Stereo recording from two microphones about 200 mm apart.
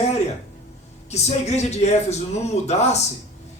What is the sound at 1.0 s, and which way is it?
Speech, 35° left (ahead or behind).